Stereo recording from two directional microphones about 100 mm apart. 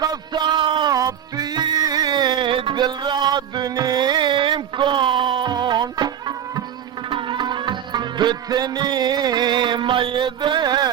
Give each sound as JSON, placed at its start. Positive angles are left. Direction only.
{"t": 0.0, "sound": "a sound", "side_deg": -45}
{"t": 0.9, "sound": "music", "side_deg": -40}
{"t": 7.1, "sound": "music", "side_deg": -55}